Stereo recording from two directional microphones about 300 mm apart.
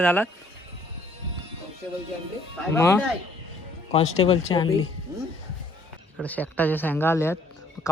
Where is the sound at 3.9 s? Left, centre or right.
Left.